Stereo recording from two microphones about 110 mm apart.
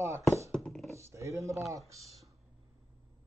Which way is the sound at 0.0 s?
25° right (ahead or behind).